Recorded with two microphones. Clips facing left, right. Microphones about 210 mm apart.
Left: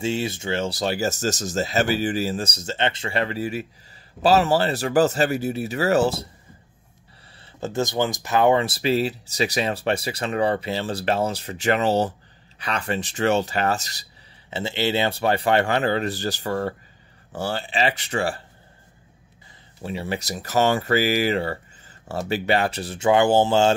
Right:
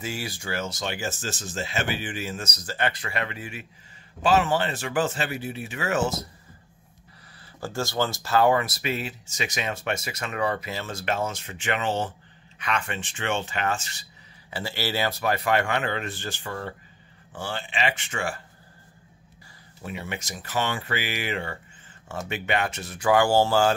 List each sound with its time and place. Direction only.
0.0 s speech: 25° left (ahead or behind)
7.6 s speech: 20° left (ahead or behind); by 14.0 s 40° left (ahead or behind)
14.5 s speech: 20° left (ahead or behind)
19.8 s speech: 30° left (ahead or behind)